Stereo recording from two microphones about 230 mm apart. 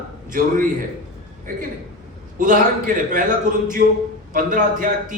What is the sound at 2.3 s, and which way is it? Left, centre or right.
Speech, right.